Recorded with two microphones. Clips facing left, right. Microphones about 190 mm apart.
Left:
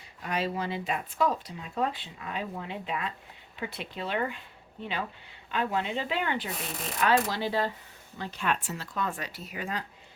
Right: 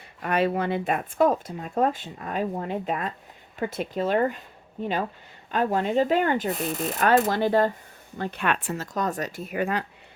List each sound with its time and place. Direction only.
0.2 s speech: 60° right (ahead or behind)
8.7 s speech: 45° right (ahead or behind); by 9.8 s 60° right (ahead or behind)